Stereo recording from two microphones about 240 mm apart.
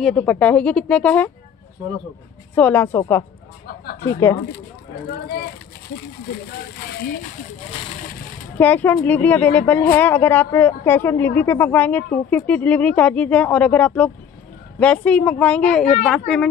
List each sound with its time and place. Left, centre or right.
0.0 s speech: centre
2.5 s a woman's voice: centre
3.6 s a sound: left
8.5 s a woman's voice: centre
15.8 s speech: left
16.1 s speech: centre